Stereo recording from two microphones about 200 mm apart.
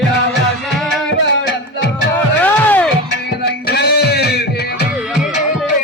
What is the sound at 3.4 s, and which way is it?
Music, 55° left (ahead or behind).